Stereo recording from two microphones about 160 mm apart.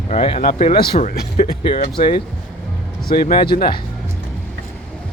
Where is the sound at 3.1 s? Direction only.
70° left (ahead or behind).